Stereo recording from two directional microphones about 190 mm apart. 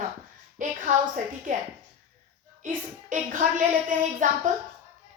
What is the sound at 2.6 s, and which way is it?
A woman's voice, 40° right (ahead or behind).